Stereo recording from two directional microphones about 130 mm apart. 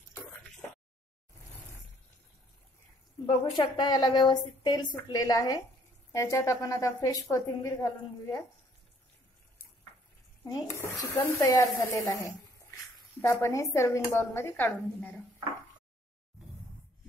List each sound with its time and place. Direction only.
3.3 s a woman's voice: 40° left (ahead or behind)
10.4 s a woman's voice: 20° left (ahead or behind)